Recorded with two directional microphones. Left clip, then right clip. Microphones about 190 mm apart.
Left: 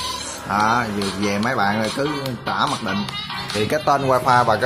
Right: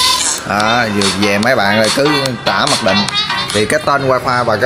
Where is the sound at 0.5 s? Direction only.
15° right (ahead or behind).